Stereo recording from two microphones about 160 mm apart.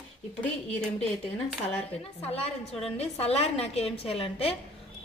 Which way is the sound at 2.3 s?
35° left (ahead or behind).